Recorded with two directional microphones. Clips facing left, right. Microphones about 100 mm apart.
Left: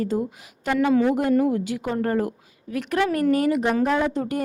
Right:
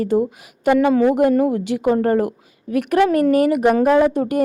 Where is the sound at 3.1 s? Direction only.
65° right (ahead or behind).